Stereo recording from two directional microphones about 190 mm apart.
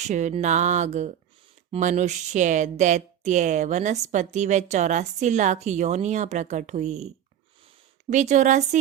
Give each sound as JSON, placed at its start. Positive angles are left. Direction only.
{"t": 0.1, "sound": "speech", "side_deg": -40}
{"t": 8.1, "sound": "speech", "side_deg": -40}